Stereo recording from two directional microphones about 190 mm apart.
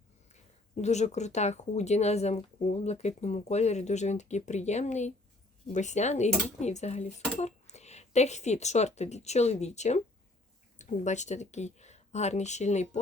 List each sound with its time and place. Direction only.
0.8 s speech: 35° left (ahead or behind)